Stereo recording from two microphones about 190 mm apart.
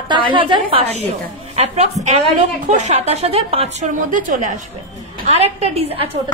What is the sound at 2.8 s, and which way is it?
A woman's voice, 35° right (ahead or behind).